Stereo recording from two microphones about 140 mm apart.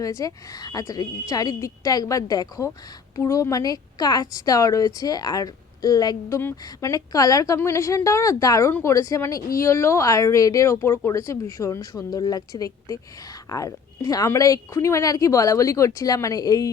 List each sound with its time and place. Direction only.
0.0 s a woman's voice: 25° left (ahead or behind)